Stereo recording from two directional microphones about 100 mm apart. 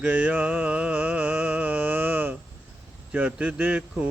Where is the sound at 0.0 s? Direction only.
15° right (ahead or behind).